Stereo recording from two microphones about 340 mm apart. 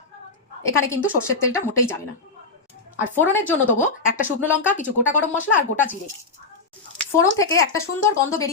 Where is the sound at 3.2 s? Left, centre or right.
Centre.